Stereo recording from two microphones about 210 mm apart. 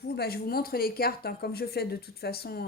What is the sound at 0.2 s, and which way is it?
Speech, 45° left (ahead or behind).